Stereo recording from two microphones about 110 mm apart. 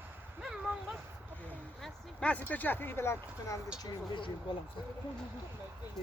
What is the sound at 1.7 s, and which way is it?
Speech, 5° left (ahead or behind).